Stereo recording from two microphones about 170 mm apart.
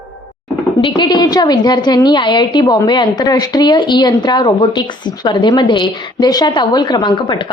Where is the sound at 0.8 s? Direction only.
30° left (ahead or behind).